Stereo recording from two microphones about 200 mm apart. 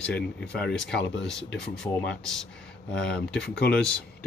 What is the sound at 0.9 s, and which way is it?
Speech, 65° left (ahead or behind).